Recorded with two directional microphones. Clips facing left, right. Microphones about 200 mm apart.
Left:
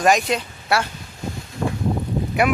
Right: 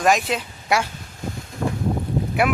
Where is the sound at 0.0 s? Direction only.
Centre (ahead or behind).